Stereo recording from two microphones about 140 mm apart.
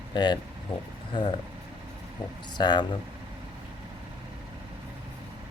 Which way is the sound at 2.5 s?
30° left (ahead or behind).